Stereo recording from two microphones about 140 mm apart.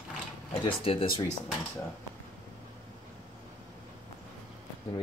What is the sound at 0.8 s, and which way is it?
Speech, 40° left (ahead or behind).